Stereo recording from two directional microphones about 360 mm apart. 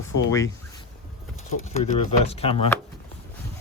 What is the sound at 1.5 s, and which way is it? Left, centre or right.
Speech, centre.